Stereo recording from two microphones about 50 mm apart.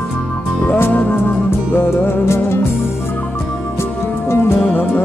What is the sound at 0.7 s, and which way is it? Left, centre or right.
Music, left.